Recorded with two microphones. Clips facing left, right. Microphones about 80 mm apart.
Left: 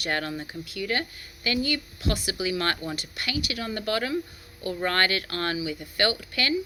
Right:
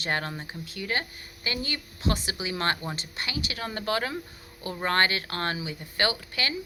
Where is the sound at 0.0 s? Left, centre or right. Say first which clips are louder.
Left 1 dB; right.